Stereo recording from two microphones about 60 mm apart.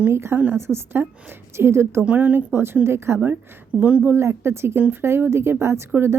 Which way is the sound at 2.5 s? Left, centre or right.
Right.